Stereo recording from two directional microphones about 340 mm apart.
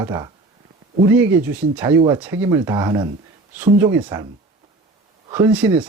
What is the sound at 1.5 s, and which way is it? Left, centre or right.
Speech, centre.